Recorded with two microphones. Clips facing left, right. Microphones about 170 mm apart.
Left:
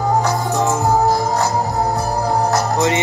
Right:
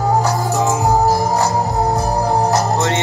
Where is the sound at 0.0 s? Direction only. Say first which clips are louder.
Right 1 dB; centre (ahead or behind).